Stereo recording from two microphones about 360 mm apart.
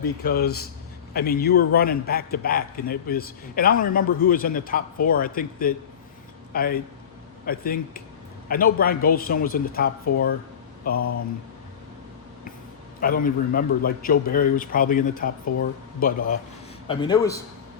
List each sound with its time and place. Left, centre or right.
0.2 s a man's voice: left
13.0 s a man's voice: left
16.9 s a man's voice: centre